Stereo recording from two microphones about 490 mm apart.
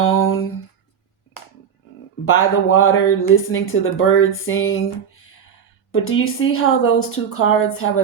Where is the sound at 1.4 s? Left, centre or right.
Left.